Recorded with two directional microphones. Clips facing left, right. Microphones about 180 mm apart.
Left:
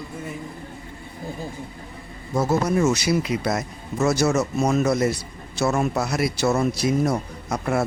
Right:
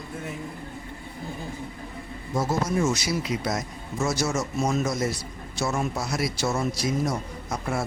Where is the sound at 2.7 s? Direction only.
65° left (ahead or behind).